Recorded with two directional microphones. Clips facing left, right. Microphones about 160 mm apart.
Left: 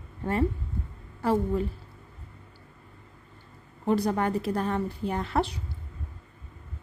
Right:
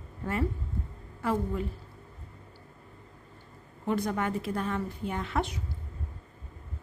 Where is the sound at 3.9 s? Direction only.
35° left (ahead or behind).